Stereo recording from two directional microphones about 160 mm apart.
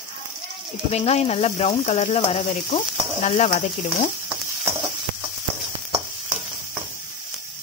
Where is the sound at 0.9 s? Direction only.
40° left (ahead or behind).